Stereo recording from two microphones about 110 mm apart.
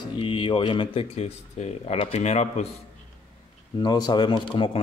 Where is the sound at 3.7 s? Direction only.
40° left (ahead or behind).